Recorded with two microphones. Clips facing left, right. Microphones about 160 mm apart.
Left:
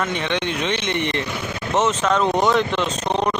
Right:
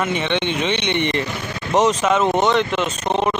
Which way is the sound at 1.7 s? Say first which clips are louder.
Right 3 dB; 15° right (ahead or behind).